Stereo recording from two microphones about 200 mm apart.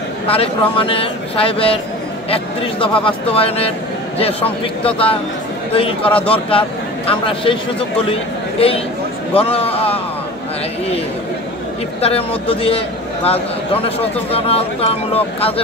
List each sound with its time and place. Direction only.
0.3 s a man's voice: 30° left (ahead or behind)
12.0 s speech: 30° left (ahead or behind)